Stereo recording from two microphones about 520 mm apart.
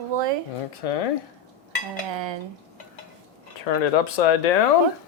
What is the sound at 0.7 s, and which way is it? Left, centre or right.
Speech, left.